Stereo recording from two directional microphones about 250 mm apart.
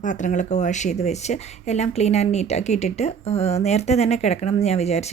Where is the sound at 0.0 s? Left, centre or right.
Left.